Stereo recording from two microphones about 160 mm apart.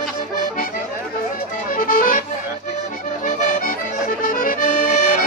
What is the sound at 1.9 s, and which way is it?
Accordion, 60° left (ahead or behind).